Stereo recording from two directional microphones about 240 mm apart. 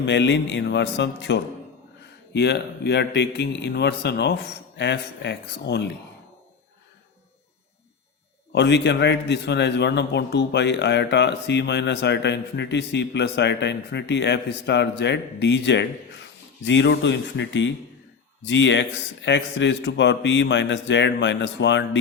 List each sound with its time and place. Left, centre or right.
0.0 s a man's voice: left
8.5 s a man's voice: left